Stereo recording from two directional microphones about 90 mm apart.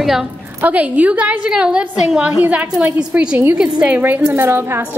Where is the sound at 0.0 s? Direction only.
5° right (ahead or behind).